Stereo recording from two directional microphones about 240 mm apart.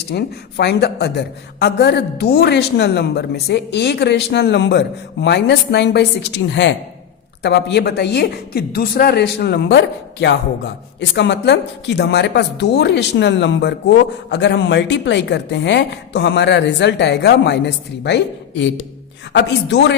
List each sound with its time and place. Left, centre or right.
0.1 s speech: left